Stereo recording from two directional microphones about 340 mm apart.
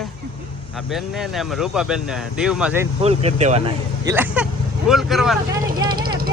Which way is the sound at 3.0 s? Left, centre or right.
Centre.